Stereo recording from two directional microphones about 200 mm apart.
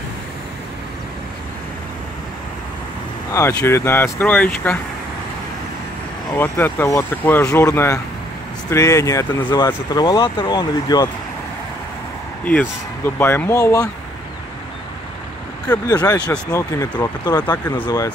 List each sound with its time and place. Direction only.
3.3 s speech: 15° left (ahead or behind)
6.3 s speech: 10° left (ahead or behind)
12.4 s speech: 10° left (ahead or behind)
15.9 s speech: 20° left (ahead or behind)